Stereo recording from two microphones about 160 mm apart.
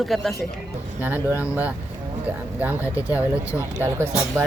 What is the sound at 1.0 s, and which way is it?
Speech, 15° right (ahead or behind).